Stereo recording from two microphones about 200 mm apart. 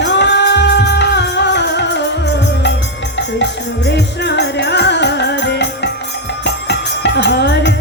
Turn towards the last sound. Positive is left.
turn(degrees=60)  # may be behind; listen again after turning